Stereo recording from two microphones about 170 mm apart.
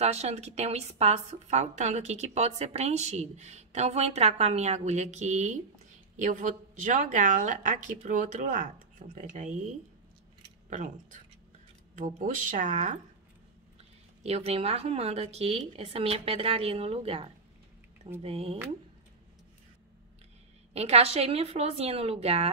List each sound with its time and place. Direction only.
0.0 s a woman's voice: 40° right (ahead or behind)
10.7 s speech: 45° right (ahead or behind)
14.2 s a woman's voice: 40° right (ahead or behind)
20.7 s a woman's voice: 40° right (ahead or behind)